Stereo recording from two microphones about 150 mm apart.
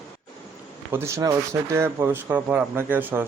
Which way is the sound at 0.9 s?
15° right (ahead or behind).